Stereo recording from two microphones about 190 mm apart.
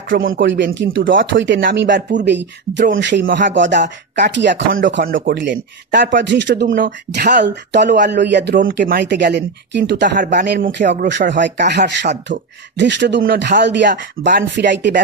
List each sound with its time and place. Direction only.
0.3 s speech: 70° right (ahead or behind)
5.0 s speech: 50° right (ahead or behind)
7.4 s speech: 65° right (ahead or behind)
8.5 s speech: 50° right (ahead or behind); by 15.0 s 65° right (ahead or behind)